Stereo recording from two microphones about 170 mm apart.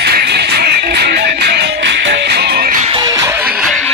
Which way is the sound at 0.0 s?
75° right (ahead or behind).